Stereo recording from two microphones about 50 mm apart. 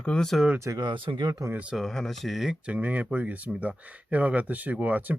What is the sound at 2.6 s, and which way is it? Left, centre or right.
Speech, right.